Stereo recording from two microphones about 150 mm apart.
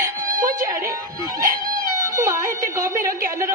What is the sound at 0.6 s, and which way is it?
A woman's voice, 25° right (ahead or behind).